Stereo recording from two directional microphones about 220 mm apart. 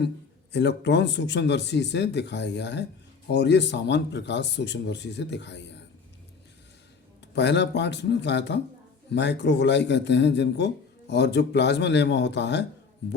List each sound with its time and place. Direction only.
0.5 s speech: 50° left (ahead or behind)
7.3 s speech: 50° left (ahead or behind)